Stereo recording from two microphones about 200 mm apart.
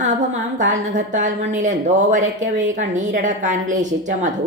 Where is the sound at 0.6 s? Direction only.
35° right (ahead or behind).